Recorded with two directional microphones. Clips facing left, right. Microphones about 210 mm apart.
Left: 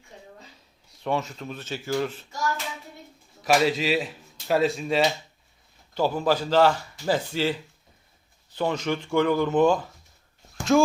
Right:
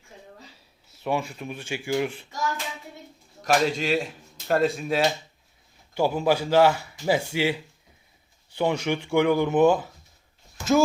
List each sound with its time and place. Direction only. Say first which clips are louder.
0.9 s speech: even; 10° right (ahead or behind)
3.4 s a man's voice: left 1 dB; 5° left (ahead or behind)
10.6 s a sound: left 1 dB; 50° left (ahead or behind)